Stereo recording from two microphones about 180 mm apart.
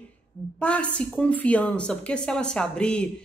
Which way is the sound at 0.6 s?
5° left (ahead or behind).